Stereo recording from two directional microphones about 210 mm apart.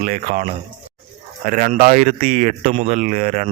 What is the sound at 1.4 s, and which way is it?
Speech, 40° right (ahead or behind).